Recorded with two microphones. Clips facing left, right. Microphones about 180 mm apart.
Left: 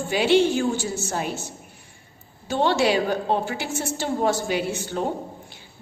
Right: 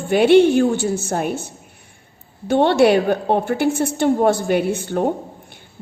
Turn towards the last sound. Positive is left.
turn(degrees=-55)  # may be behind; listen again after turning